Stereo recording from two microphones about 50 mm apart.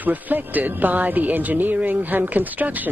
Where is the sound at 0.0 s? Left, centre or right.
Right.